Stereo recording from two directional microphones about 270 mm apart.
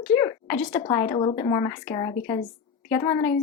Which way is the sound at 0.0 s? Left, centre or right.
Centre.